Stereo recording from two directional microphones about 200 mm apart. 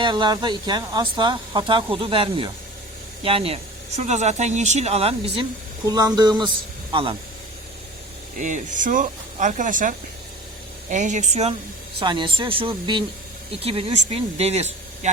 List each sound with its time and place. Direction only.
0.0 s speech: 20° right (ahead or behind)
8.4 s speech: 40° right (ahead or behind)
11.9 s speech: 25° right (ahead or behind)